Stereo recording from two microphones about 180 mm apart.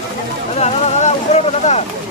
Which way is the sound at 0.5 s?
40° left (ahead or behind).